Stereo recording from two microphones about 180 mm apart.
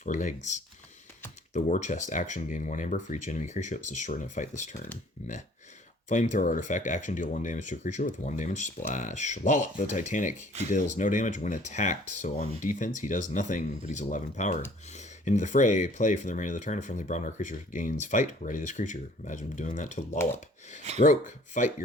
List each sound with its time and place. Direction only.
0.0 s speech: 45° left (ahead or behind)
6.1 s speech: 45° left (ahead or behind)